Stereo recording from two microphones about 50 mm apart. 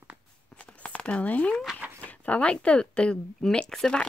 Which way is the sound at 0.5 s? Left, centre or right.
Left.